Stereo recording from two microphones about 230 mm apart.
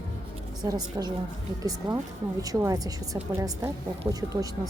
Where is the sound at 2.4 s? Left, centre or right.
Centre.